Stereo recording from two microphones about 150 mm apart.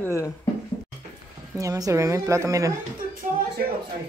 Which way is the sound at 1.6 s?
20° right (ahead or behind).